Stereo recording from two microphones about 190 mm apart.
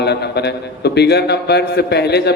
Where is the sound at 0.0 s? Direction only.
60° left (ahead or behind).